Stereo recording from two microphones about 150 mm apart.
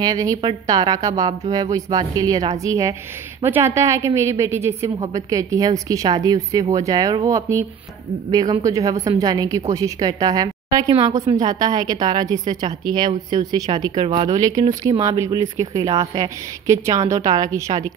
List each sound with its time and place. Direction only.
0.0 s a woman's voice: 25° right (ahead or behind)
14.8 s a woman's voice: 20° right (ahead or behind)